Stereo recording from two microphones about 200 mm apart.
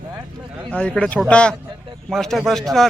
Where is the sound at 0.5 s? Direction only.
5° left (ahead or behind).